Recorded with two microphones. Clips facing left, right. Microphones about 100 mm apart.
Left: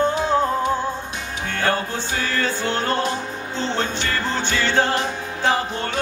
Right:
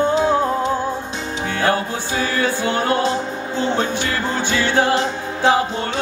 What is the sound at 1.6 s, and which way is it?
Music, 10° right (ahead or behind).